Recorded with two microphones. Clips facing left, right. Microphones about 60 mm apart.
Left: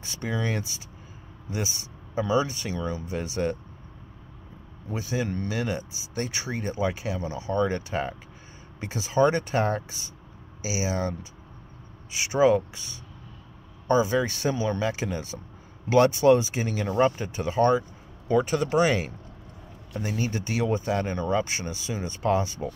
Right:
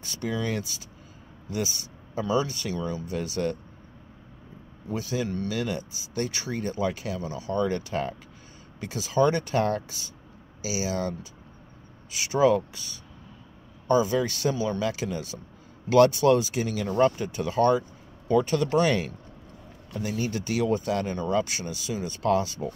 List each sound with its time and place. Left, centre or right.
0.0 s speech: left
2.1 s speech: left
4.9 s speech: left
5.3 s speech: left
5.6 s speech: left
8.7 s speech: left
14.5 s speech: left